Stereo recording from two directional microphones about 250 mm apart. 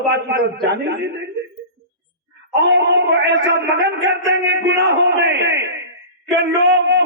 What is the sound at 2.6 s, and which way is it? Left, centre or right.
A man's voice, right.